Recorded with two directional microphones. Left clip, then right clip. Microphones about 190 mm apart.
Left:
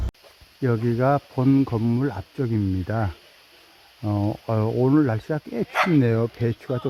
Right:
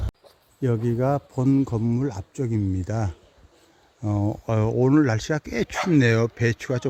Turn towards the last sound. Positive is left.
turn(degrees=0)  # may be behind; listen again after turning